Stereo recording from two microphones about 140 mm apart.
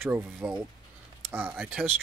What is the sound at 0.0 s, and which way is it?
Speech, 10° right (ahead or behind).